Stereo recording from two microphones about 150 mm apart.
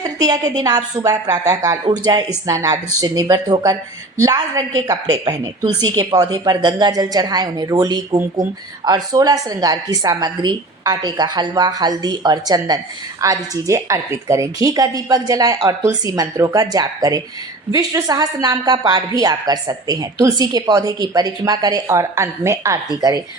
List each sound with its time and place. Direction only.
0.0 s a woman's voice: 25° right (ahead or behind)